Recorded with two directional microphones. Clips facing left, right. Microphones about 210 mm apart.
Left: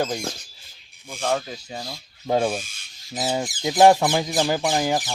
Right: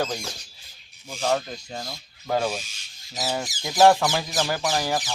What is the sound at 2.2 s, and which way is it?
Speech, 20° left (ahead or behind).